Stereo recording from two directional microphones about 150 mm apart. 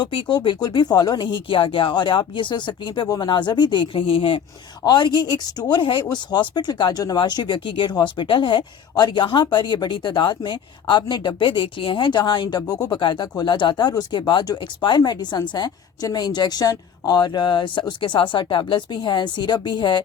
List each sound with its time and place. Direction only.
0.0 s speech: 30° left (ahead or behind)